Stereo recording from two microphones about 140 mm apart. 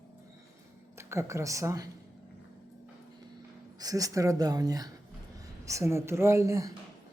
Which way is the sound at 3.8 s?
25° right (ahead or behind).